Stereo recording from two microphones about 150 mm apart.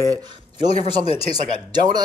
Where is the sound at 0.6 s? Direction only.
40° left (ahead or behind).